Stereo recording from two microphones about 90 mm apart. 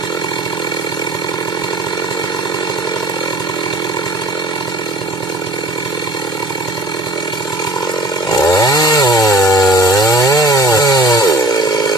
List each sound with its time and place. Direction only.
8.3 s chainsaw: 40° left (ahead or behind)